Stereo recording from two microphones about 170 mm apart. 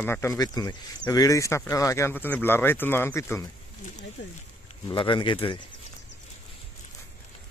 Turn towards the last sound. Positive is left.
turn(degrees=30)  # may be behind; listen again after turning